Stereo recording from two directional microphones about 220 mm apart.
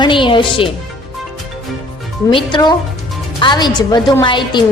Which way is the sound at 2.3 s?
20° left (ahead or behind).